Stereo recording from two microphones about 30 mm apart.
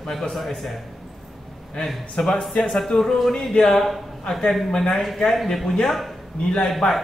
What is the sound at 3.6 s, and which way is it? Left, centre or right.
A man's voice, centre.